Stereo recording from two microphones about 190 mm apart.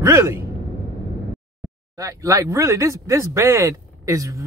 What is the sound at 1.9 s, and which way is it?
Speech, 15° right (ahead or behind).